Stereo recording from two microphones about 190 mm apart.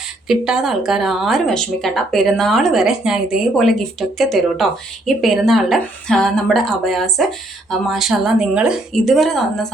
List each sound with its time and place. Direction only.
0.3 s a woman's voice: 5° right (ahead or behind)